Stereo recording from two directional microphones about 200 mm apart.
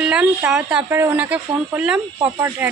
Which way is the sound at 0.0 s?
5° right (ahead or behind).